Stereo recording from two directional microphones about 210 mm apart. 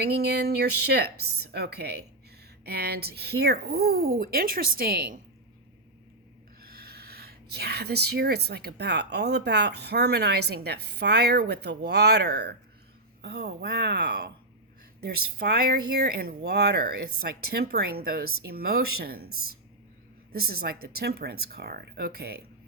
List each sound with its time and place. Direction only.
0.0 s speech: 50° right (ahead or behind)
6.9 s speech: 50° right (ahead or behind)